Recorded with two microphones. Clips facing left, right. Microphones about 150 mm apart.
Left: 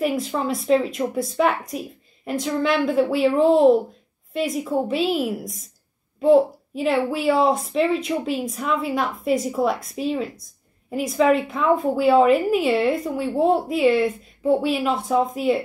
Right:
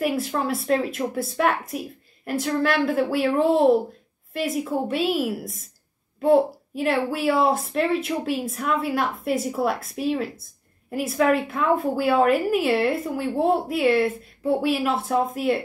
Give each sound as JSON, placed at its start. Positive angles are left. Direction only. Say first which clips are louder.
{"t": 0.0, "sound": "a woman's voice", "louder": "left 1 dB", "side_deg": -5}